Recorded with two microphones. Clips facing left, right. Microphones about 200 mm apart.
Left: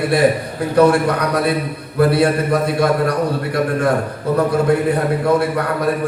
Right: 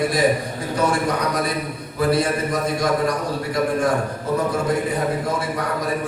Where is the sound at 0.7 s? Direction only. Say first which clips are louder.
Left 8 dB; 60° left (ahead or behind).